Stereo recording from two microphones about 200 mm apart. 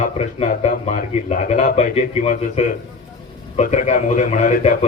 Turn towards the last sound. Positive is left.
turn(degrees=40)  # may be behind; listen again after turning